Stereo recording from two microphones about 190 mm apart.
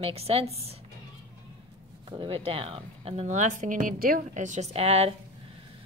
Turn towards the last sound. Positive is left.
turn(degrees=-30)  # may be behind; listen again after turning